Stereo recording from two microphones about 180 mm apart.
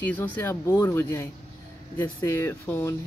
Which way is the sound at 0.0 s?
10° left (ahead or behind).